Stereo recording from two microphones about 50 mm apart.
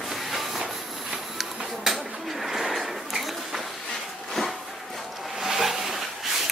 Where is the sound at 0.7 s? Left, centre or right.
Centre.